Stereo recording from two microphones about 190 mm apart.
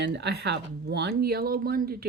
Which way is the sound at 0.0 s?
65° right (ahead or behind).